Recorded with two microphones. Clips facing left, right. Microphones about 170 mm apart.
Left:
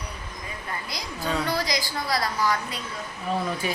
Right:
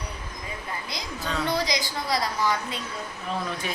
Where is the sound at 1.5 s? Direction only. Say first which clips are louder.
Right 1 dB; 20° right (ahead or behind).